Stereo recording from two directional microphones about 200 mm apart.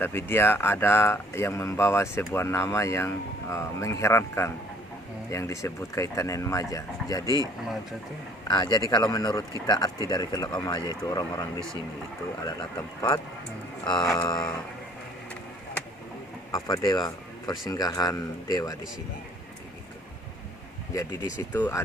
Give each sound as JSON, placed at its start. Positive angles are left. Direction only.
{"t": 0.0, "sound": "speech", "side_deg": 10}
{"t": 8.4, "sound": "speech", "side_deg": 20}
{"t": 13.8, "sound": "speech", "side_deg": 20}
{"t": 16.5, "sound": "speech", "side_deg": 15}
{"t": 20.9, "sound": "speech", "side_deg": 15}